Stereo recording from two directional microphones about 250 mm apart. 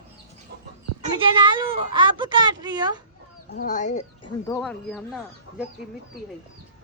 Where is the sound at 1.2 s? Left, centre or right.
Centre.